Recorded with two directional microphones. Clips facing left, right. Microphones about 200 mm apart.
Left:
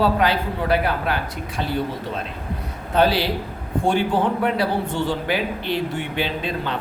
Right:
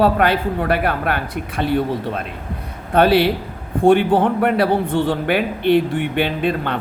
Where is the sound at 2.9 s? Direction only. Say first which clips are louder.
Right 5 dB; 55° right (ahead or behind).